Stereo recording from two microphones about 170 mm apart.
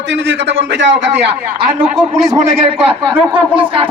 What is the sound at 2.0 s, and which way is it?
Speech, 20° right (ahead or behind).